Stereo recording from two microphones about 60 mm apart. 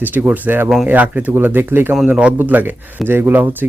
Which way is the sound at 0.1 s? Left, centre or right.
Right.